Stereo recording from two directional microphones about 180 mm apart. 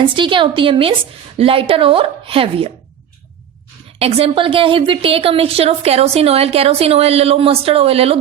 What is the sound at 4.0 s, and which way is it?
A woman's voice, 35° right (ahead or behind).